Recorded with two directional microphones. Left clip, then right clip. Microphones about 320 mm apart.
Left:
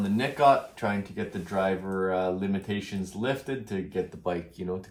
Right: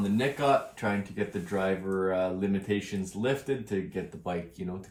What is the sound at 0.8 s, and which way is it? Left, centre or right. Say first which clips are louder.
Speech: even; centre.